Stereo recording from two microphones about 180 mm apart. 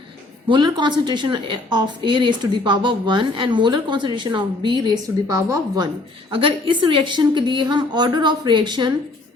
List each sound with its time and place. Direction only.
0.4 s a woman's voice: 25° right (ahead or behind)